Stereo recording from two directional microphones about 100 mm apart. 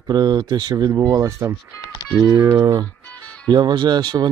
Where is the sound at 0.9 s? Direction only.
30° right (ahead or behind).